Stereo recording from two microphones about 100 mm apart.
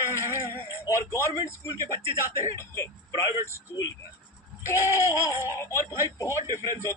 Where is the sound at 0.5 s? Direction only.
30° left (ahead or behind).